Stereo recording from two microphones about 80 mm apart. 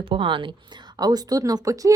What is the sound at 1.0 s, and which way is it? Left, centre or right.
Speech, right.